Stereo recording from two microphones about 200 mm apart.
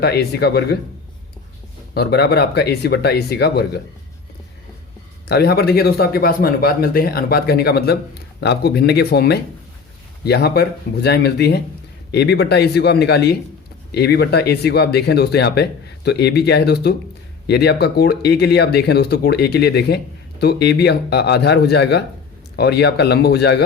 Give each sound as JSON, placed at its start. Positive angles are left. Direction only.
{"t": 0.0, "sound": "speech", "side_deg": 55}
{"t": 1.9, "sound": "speech", "side_deg": 55}
{"t": 5.3, "sound": "speech", "side_deg": 50}